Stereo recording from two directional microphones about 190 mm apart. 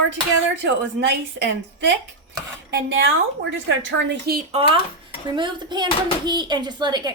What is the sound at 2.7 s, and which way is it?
A woman's voice, 75° right (ahead or behind).